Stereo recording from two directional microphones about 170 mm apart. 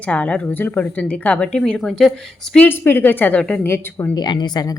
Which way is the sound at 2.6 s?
10° left (ahead or behind).